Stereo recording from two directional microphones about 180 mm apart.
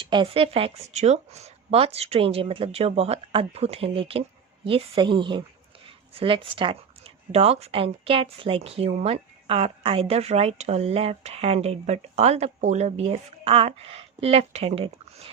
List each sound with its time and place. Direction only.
0.0 s a woman's voice: 30° right (ahead or behind)